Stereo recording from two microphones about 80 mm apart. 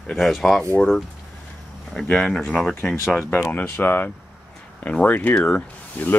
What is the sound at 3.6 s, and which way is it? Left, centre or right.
Speech, left.